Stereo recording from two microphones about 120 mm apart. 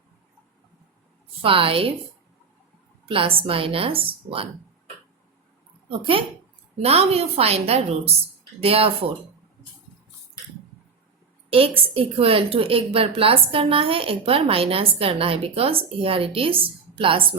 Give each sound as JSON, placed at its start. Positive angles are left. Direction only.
{"t": 1.4, "sound": "a woman's voice", "side_deg": -50}
{"t": 3.1, "sound": "a woman's voice", "side_deg": -50}
{"t": 5.9, "sound": "a woman's voice", "side_deg": -45}
{"t": 6.8, "sound": "a woman's voice", "side_deg": -55}
{"t": 11.5, "sound": "a woman's voice", "side_deg": -50}